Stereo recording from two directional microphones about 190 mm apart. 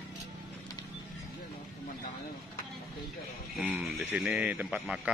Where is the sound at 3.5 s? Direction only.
5° right (ahead or behind).